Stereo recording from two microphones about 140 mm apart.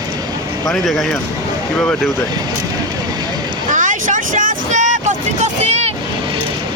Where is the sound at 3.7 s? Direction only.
65° right (ahead or behind).